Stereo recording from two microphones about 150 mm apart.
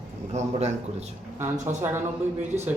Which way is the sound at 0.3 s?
50° right (ahead or behind).